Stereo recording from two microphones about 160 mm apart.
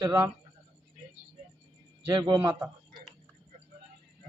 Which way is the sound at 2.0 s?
30° right (ahead or behind).